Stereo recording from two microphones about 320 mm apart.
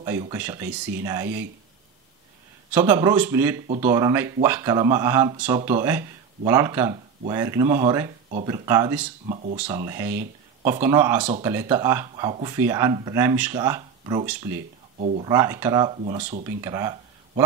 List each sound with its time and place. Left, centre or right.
0.0 s speech: centre
2.7 s speech: centre
9.3 s speech: right
9.8 s speech: centre
15.0 s speech: right
15.2 s speech: centre
16.4 s speech: centre